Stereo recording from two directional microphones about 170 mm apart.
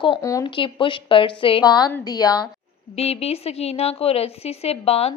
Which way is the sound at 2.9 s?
35° left (ahead or behind).